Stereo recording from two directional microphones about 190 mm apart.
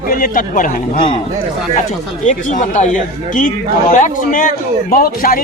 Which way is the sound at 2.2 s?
40° left (ahead or behind).